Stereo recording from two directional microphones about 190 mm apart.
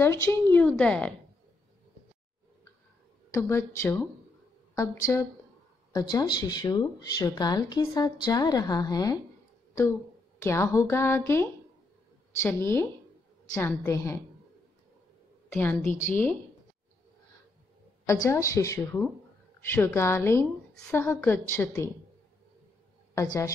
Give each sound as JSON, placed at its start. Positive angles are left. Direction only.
{"t": 0.0, "sound": "a woman's voice", "side_deg": 15}
{"t": 3.3, "sound": "a woman's voice", "side_deg": 15}
{"t": 10.4, "sound": "a woman's voice", "side_deg": 15}
{"t": 15.5, "sound": "a woman's voice", "side_deg": 10}
{"t": 18.0, "sound": "a woman's voice", "side_deg": 15}
{"t": 23.1, "sound": "a woman's voice", "side_deg": 20}